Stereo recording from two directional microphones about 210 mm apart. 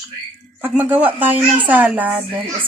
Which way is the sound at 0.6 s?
10° right (ahead or behind).